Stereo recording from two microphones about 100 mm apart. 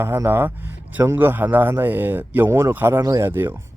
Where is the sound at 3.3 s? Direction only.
20° right (ahead or behind).